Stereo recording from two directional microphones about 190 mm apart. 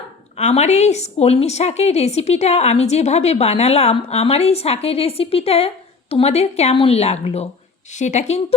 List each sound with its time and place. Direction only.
0.3 s a woman's voice: 35° left (ahead or behind)